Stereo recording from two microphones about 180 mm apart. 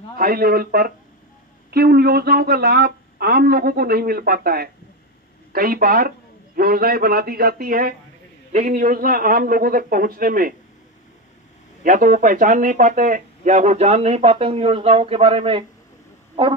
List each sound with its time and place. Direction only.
0.2 s speech: 55° right (ahead or behind)
8.5 s a man's voice: 40° right (ahead or behind)
8.7 s speech: 55° right (ahead or behind)
11.8 s speech: 50° right (ahead or behind); by 15.6 s 30° right (ahead or behind)